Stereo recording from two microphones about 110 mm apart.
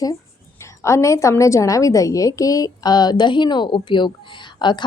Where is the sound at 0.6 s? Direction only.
25° left (ahead or behind).